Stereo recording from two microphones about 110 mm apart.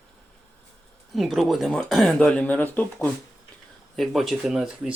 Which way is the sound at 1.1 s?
Centre (ahead or behind).